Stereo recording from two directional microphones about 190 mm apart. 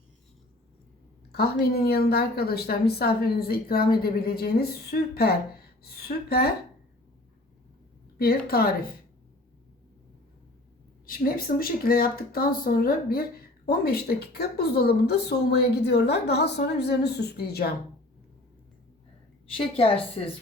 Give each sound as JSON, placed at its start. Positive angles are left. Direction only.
{"t": 1.3, "sound": "a woman's voice", "side_deg": 55}
{"t": 8.2, "sound": "speech", "side_deg": 55}
{"t": 11.0, "sound": "a woman's voice", "side_deg": 50}
{"t": 19.5, "sound": "a woman's voice", "side_deg": 30}